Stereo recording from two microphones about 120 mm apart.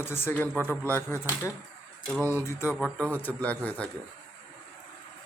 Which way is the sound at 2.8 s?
Centre (ahead or behind).